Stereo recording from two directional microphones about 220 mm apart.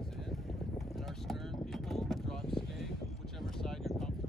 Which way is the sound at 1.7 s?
Centre (ahead or behind).